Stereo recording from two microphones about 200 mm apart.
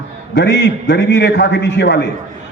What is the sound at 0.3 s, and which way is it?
A man's voice, 60° left (ahead or behind).